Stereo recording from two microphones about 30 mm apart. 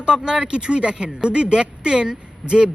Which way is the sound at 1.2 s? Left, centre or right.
Right.